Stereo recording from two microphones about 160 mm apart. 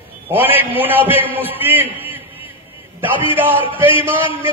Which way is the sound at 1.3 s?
10° right (ahead or behind).